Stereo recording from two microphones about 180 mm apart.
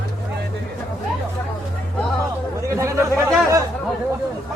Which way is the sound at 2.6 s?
15° right (ahead or behind).